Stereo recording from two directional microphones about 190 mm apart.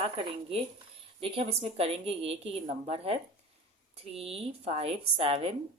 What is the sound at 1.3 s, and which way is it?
A woman's voice, 30° right (ahead or behind).